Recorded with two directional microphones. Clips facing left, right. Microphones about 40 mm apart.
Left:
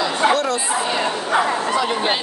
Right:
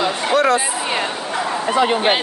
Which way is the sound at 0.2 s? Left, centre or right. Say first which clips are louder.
Left 3 dB; centre.